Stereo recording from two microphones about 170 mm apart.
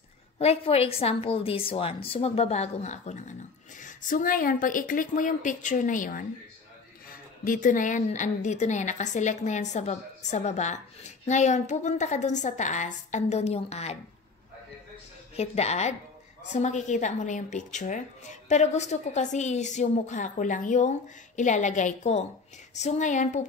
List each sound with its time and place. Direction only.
0.4 s a woman's voice: 35° left (ahead or behind)
15.3 s a woman's voice: 40° left (ahead or behind)